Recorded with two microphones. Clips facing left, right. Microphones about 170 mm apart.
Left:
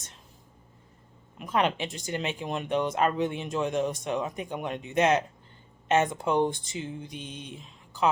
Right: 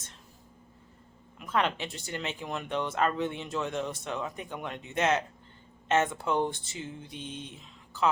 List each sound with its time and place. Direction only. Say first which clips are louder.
1.4 s speech: left 3 dB; 15° left (ahead or behind)